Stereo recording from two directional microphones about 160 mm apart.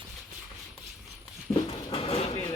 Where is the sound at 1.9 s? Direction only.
35° left (ahead or behind).